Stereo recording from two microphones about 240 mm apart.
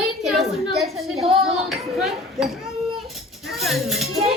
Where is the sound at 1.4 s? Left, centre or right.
Centre.